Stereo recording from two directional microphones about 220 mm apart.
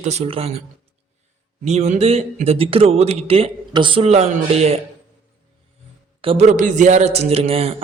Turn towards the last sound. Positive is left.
turn(degrees=-25)  # may be behind; listen again after turning